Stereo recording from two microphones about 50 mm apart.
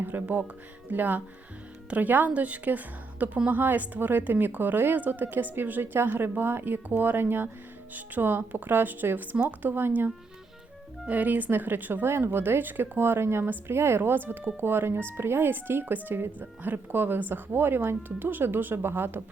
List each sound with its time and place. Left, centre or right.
0.0 s a woman's voice: right
9.6 s speech: right
11.1 s speech: right
13.4 s a woman's voice: right
13.7 s speech: right